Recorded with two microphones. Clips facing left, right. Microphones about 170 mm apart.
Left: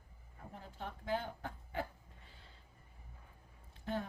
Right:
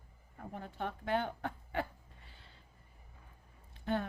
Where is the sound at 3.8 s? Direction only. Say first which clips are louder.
Right 5 dB; 70° right (ahead or behind).